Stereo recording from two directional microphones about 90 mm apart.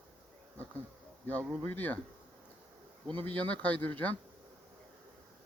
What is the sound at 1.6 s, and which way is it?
Speech, 20° left (ahead or behind).